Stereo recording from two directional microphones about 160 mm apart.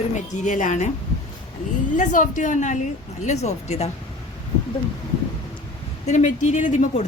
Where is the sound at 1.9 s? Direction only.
55° left (ahead or behind).